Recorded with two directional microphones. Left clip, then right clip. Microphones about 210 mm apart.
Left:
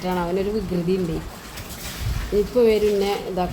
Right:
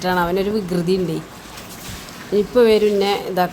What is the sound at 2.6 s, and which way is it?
Speech, 10° right (ahead or behind).